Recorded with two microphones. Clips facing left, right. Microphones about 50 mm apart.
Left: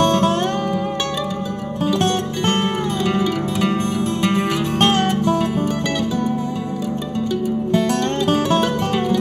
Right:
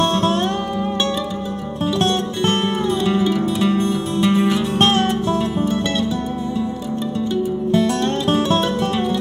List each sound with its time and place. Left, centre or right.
3.1 s music: left